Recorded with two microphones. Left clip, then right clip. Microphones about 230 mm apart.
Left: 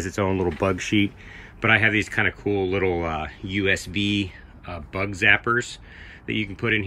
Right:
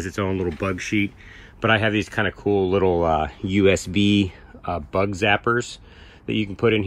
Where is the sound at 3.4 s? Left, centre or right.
Right.